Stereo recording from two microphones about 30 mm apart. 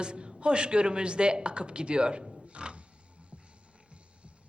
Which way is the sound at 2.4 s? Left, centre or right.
Right.